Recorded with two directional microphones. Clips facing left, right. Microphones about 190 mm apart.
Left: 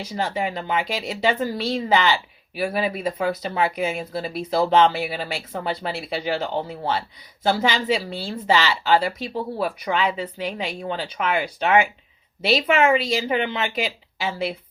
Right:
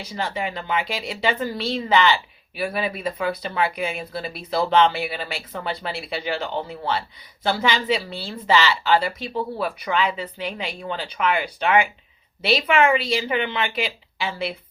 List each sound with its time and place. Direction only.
0.0 s a woman's voice: 45° left (ahead or behind)